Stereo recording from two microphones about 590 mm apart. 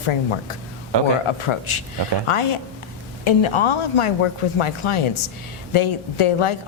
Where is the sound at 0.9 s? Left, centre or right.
Right.